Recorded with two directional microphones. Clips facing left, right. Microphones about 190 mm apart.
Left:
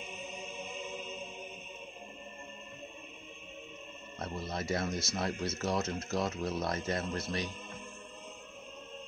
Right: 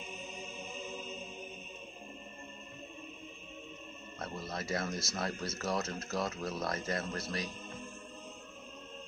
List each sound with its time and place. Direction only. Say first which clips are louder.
4.2 s speech: left 3 dB; 25° left (ahead or behind)